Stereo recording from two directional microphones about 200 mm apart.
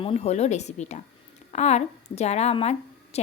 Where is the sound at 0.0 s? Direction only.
30° left (ahead or behind).